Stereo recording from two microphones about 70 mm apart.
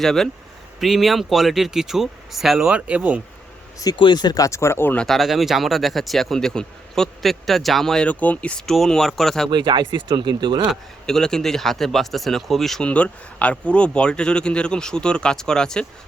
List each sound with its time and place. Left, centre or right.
0.0 s speech: centre
3.8 s speech: left
4.4 s speech: left
5.0 s speech: centre
8.0 s speech: left
8.6 s speech: centre
10.1 s speech: right
11.0 s speech: centre
12.8 s speech: centre